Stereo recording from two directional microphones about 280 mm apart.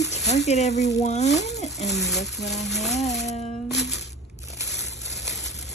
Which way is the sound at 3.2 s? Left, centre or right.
Left.